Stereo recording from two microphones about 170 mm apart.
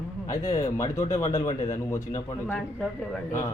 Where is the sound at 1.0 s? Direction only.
40° left (ahead or behind).